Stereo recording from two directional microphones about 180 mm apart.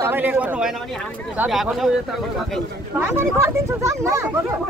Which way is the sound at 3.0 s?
15° right (ahead or behind).